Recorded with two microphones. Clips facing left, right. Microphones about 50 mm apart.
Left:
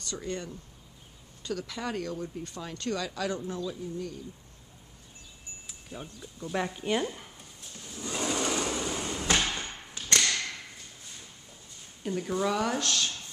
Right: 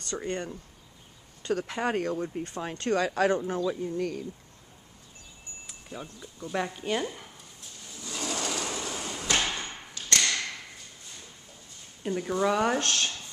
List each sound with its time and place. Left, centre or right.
0.0 s speech: right
6.4 s speech: centre
8.0 s a sound: left
9.4 s a sound: centre
12.0 s speech: centre
12.5 s speech: right
12.8 s speech: right